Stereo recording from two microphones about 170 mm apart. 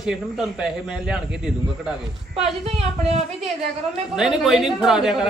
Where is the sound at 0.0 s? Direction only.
5° right (ahead or behind).